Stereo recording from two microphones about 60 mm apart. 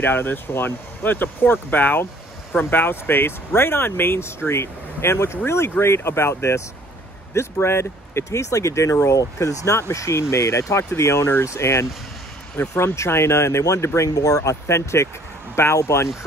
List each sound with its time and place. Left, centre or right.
0.0 s speech: left
9.2 s speech: left
9.8 s speech: left
12.5 s speech: left
14.1 s speech: left